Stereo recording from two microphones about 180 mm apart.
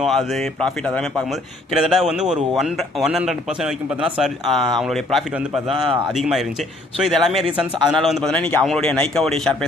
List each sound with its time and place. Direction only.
0.0 s a man's voice: centre (ahead or behind)
5.7 s speech: 30° right (ahead or behind)
6.1 s a man's voice: centre (ahead or behind)